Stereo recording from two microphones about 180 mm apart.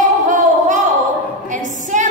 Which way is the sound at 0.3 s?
45° right (ahead or behind).